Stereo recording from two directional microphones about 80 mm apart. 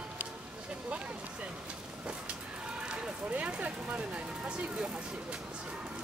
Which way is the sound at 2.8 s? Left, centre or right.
Centre.